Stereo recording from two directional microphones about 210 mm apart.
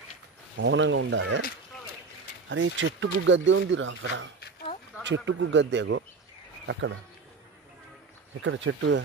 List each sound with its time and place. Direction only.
0.6 s speech: 60° right (ahead or behind)
2.5 s speech: 65° right (ahead or behind)
8.4 s speech: 65° right (ahead or behind)